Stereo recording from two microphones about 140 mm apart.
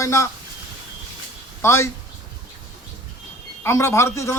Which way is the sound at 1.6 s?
20° left (ahead or behind).